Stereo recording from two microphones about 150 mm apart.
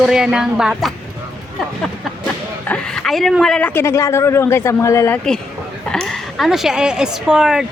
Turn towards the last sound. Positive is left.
turn(degrees=-5)  # may be behind; listen again after turning